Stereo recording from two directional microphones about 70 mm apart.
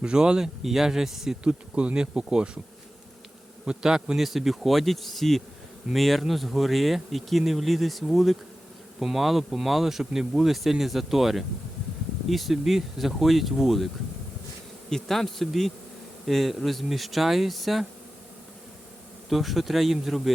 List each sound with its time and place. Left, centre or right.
0.0 s speech: centre
1.7 s speech: centre
3.7 s speech: centre
19.3 s speech: centre